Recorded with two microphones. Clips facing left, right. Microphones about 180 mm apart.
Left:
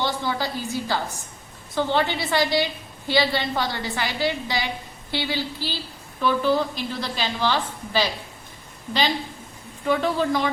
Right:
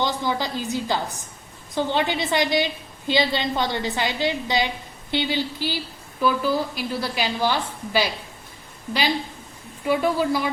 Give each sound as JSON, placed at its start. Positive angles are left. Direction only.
{"t": 0.0, "sound": "a woman's voice", "side_deg": -20}